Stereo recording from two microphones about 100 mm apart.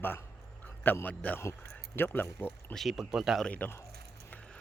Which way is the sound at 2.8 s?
Centre (ahead or behind).